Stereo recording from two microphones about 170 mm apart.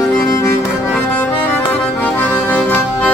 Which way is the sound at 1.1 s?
10° left (ahead or behind).